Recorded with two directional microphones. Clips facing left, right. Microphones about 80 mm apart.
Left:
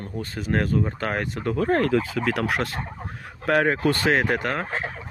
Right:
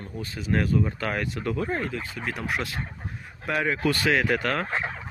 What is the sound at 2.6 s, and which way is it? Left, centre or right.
Speech, left.